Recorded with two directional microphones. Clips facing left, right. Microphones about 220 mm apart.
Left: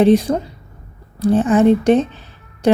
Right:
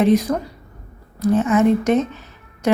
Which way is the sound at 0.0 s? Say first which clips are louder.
Left 3 dB; 30° left (ahead or behind).